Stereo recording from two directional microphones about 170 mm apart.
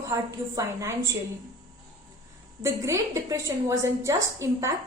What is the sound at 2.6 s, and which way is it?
A woman's voice, 15° right (ahead or behind).